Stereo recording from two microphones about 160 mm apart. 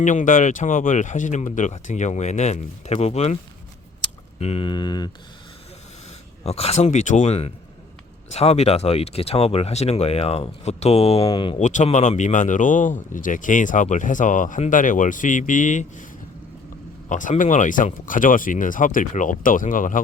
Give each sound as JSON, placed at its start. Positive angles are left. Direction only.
{"t": 0.0, "sound": "speech", "side_deg": 50}
{"t": 4.4, "sound": "speech", "side_deg": 40}
{"t": 6.4, "sound": "speech", "side_deg": 40}
{"t": 11.5, "sound": "speech", "side_deg": 50}
{"t": 17.1, "sound": "speech", "side_deg": 55}